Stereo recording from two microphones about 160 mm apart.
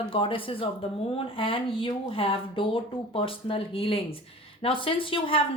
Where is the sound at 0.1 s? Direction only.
35° left (ahead or behind).